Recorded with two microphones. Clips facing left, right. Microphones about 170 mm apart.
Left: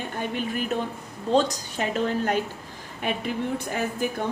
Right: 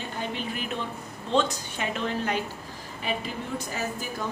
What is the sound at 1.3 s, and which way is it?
A woman's voice, 40° left (ahead or behind).